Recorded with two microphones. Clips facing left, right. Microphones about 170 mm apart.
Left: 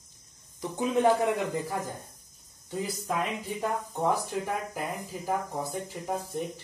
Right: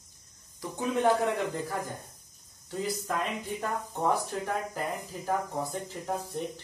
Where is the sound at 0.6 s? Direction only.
15° left (ahead or behind).